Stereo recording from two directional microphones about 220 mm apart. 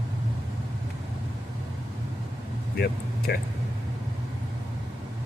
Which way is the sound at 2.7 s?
45° left (ahead or behind).